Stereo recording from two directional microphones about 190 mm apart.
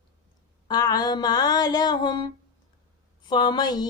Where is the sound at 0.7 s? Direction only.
20° left (ahead or behind).